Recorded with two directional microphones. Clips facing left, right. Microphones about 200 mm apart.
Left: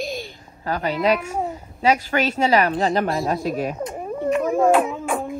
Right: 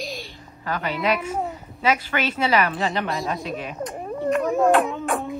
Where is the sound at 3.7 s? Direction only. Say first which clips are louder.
Left 2 dB; centre (ahead or behind).